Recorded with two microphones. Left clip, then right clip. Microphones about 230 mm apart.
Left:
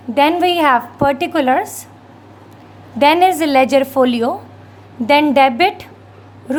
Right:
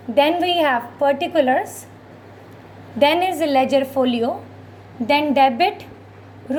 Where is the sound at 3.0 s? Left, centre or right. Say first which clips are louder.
Left 5 dB; left.